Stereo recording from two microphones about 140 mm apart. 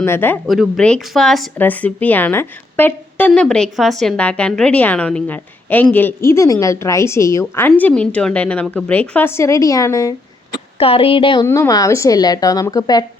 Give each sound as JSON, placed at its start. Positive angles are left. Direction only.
{"t": 0.0, "sound": "a woman's voice", "side_deg": 15}
{"t": 0.4, "sound": "speech", "side_deg": 0}
{"t": 1.5, "sound": "a woman's voice", "side_deg": 10}
{"t": 10.8, "sound": "speech", "side_deg": 40}
{"t": 11.4, "sound": "a woman's voice", "side_deg": 20}